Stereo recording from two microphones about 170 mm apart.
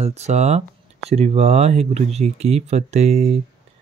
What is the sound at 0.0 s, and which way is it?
Speech, 40° right (ahead or behind).